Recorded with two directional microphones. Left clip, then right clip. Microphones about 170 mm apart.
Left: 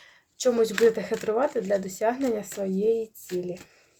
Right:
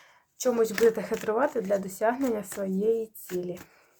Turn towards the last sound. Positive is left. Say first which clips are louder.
# left 2 dB
turn(degrees=5)  # may be behind; listen again after turning